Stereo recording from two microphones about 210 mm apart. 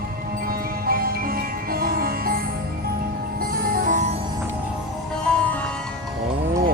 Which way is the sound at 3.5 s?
45° right (ahead or behind).